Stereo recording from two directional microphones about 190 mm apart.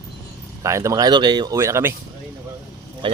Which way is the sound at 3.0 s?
25° right (ahead or behind).